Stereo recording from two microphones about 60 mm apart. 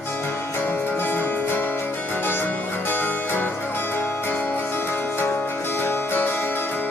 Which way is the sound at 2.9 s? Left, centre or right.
Left.